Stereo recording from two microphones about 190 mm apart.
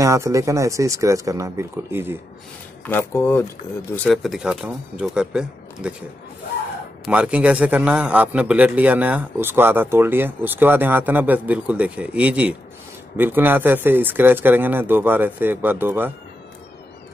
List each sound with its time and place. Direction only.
0.0 s a man's voice: 15° right (ahead or behind)
2.8 s speech: 10° left (ahead or behind); by 5.9 s 5° right (ahead or behind)
7.1 s a man's voice: 5° right (ahead or behind)